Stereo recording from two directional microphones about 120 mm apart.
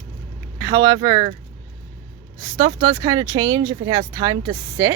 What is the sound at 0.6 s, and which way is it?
Speech, 30° right (ahead or behind).